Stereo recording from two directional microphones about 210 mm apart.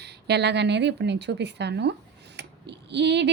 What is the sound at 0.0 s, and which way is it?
Speech, 55° right (ahead or behind).